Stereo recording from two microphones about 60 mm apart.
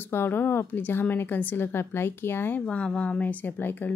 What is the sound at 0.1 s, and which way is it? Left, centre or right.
Speech, left.